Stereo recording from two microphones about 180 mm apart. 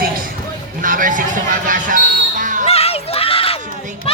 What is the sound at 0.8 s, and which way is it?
Speech, 50° right (ahead or behind).